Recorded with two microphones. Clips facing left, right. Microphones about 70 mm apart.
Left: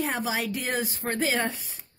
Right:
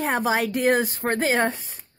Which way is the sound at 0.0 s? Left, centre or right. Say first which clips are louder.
Right 6 dB; right.